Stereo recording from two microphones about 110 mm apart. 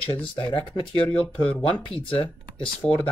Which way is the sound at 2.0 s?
50° left (ahead or behind).